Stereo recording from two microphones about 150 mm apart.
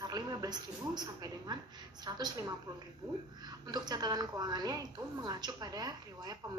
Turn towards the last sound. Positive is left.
turn(degrees=-25)  # may be behind; listen again after turning